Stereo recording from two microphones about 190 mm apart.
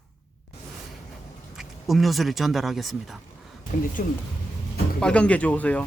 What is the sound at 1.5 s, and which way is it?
Speech, centre (ahead or behind).